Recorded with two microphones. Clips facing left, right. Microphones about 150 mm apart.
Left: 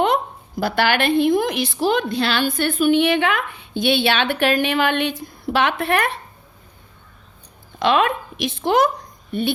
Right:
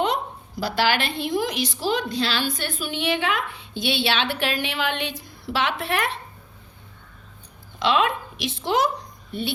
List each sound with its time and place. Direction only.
0.0 s speech: 55° left (ahead or behind)
7.8 s speech: 50° left (ahead or behind)